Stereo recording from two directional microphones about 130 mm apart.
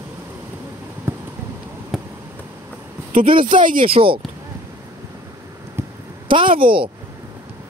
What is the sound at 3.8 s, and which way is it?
Speech, 45° right (ahead or behind).